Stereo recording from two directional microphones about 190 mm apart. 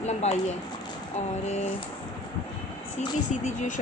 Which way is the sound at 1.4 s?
35° left (ahead or behind).